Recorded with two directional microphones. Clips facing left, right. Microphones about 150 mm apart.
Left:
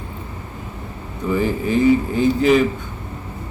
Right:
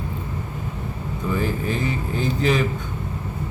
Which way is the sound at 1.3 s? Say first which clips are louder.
Left 6 dB; 5° left (ahead or behind).